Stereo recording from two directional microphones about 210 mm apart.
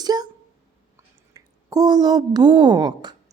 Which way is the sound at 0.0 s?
20° right (ahead or behind).